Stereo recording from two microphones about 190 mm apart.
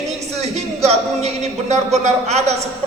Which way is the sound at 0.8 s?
35° right (ahead or behind).